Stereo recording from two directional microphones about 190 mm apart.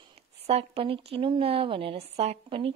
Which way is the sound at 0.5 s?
30° right (ahead or behind).